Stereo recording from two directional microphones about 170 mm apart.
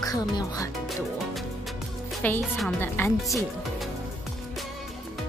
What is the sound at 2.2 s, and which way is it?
Speech, 10° left (ahead or behind).